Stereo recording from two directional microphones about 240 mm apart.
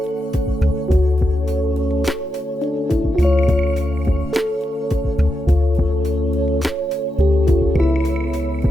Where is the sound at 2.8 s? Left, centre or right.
Centre.